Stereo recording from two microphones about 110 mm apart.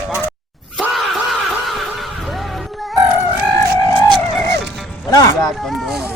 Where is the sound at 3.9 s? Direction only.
45° right (ahead or behind).